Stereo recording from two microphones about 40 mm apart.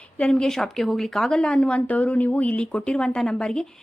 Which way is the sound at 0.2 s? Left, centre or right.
Left.